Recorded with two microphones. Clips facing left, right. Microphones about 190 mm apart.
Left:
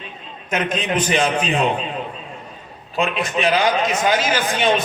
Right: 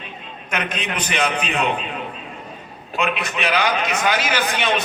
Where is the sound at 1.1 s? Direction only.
30° left (ahead or behind).